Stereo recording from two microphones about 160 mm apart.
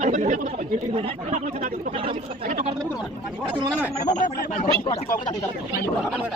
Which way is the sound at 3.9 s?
50° left (ahead or behind).